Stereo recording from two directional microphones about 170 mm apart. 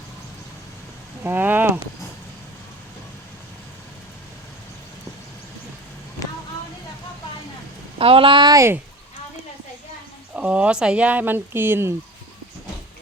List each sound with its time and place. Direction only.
1.2 s a sound: 10° right (ahead or behind)
7.9 s speech: 35° right (ahead or behind); by 8.8 s 15° right (ahead or behind)
10.3 s speech: 5° right (ahead or behind)